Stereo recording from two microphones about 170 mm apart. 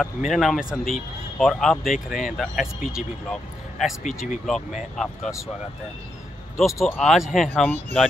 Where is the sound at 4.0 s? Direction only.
45° left (ahead or behind).